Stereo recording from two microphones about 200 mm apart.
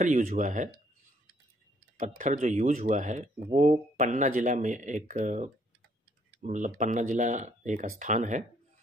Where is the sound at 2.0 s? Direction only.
40° right (ahead or behind).